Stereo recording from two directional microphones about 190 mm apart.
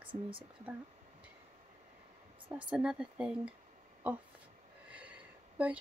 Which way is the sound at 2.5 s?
5° right (ahead or behind).